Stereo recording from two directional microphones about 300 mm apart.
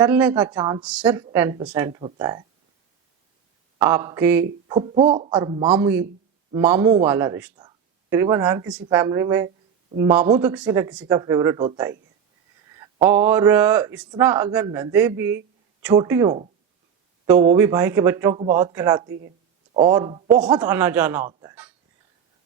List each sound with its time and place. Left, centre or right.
0.0 s a woman's voice: centre
3.8 s a man's voice: centre
19.0 s speech: right
19.7 s a man's voice: centre